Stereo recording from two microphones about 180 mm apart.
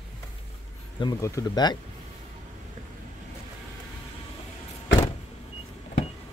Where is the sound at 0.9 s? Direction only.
20° left (ahead or behind).